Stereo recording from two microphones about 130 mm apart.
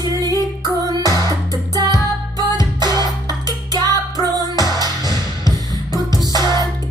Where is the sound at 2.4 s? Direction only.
35° right (ahead or behind).